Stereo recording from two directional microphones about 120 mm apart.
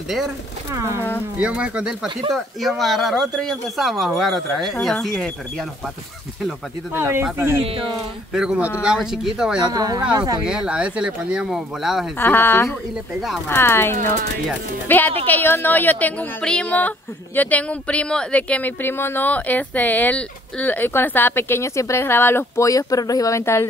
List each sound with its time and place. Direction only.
0.7 s speech: 25° right (ahead or behind)
1.4 s speech: 10° right (ahead or behind)
7.0 s speech: 20° right (ahead or behind)
8.3 s speech: 5° right (ahead or behind)
9.6 s speech: 35° right (ahead or behind)
10.4 s speech: 5° right (ahead or behind)
12.2 s speech: 20° left (ahead or behind)